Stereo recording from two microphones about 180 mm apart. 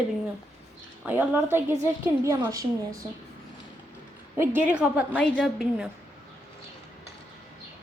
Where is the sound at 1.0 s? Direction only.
10° right (ahead or behind).